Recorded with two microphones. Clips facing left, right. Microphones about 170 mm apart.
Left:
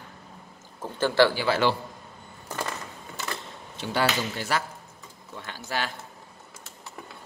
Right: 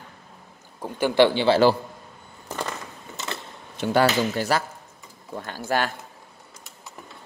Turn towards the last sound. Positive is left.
turn(degrees=-45)  # may be behind; listen again after turning